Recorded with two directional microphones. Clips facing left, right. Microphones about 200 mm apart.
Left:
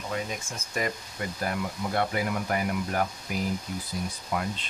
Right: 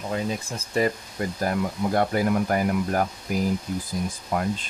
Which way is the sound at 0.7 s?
30° right (ahead or behind).